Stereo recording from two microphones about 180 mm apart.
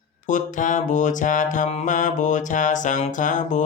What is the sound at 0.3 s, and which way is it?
Mantra, 45° left (ahead or behind).